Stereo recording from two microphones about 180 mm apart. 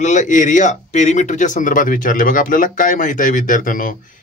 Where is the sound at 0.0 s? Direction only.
45° left (ahead or behind).